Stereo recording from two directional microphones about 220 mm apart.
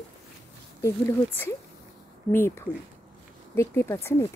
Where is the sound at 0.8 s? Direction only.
10° left (ahead or behind).